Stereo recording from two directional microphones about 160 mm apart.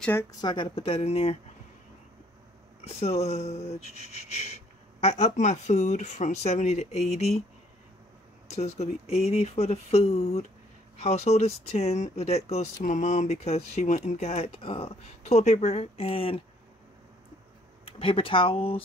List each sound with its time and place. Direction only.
0.0 s speech: 15° left (ahead or behind)
0.4 s speech: 25° left (ahead or behind)
2.8 s speech: 40° left (ahead or behind)
5.0 s speech: 45° left (ahead or behind)
8.5 s speech: 40° left (ahead or behind)
17.8 s speech: 35° left (ahead or behind)